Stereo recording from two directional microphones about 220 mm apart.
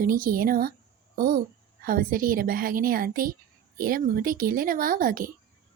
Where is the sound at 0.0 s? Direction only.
40° right (ahead or behind).